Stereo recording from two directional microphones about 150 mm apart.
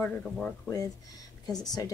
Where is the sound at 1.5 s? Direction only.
25° left (ahead or behind).